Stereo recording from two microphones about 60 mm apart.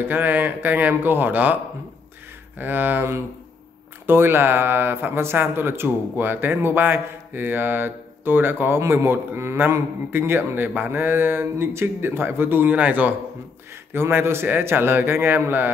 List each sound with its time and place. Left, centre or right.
0.0 s speech: right
2.6 s speech: right
13.9 s speech: right